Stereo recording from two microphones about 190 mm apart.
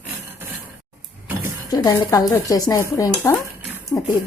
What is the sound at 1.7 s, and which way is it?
Speech, 20° left (ahead or behind).